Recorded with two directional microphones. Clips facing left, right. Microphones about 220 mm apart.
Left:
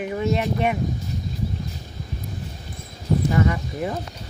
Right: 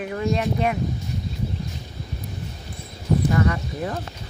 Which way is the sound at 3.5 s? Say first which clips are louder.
Left 1 dB; 10° left (ahead or behind).